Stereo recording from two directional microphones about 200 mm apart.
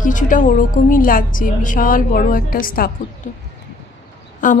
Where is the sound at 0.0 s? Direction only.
40° left (ahead or behind).